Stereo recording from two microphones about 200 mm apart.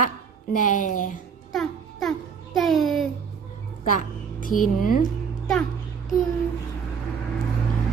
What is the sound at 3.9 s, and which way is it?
A woman's voice, 40° left (ahead or behind).